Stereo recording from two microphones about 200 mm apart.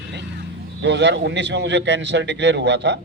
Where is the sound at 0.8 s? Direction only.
60° right (ahead or behind).